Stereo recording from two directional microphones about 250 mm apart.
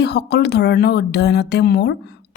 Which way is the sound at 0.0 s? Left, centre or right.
Left.